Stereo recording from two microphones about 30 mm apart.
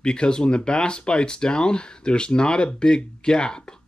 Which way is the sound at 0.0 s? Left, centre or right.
Left.